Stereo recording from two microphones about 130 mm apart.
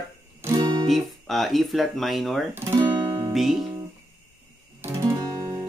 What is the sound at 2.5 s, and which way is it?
Speech, 20° right (ahead or behind).